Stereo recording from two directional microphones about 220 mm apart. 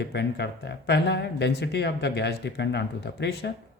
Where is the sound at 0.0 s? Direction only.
50° left (ahead or behind).